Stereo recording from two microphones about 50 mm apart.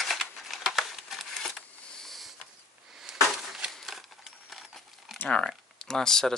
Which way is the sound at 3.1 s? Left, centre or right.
Centre.